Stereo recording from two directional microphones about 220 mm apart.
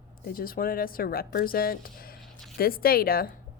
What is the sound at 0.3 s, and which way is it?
A woman's voice, 40° left (ahead or behind).